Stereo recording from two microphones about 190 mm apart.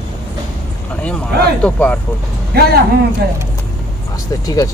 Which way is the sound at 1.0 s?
5° left (ahead or behind).